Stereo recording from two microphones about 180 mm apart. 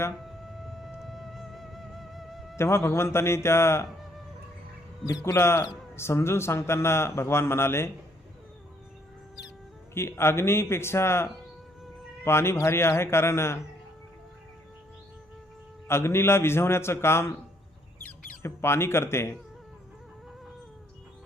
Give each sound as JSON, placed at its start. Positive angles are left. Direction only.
{"t": 0.2, "sound": "music", "side_deg": 0}
{"t": 2.6, "sound": "speech", "side_deg": 15}
{"t": 5.2, "sound": "speech", "side_deg": 15}
{"t": 9.9, "sound": "speech", "side_deg": 15}
{"t": 15.9, "sound": "speech", "side_deg": 15}
{"t": 18.4, "sound": "speech", "side_deg": 15}